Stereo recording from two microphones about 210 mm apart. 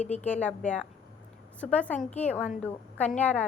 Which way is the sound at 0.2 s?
5° left (ahead or behind).